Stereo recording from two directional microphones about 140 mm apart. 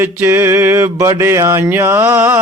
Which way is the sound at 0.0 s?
15° right (ahead or behind).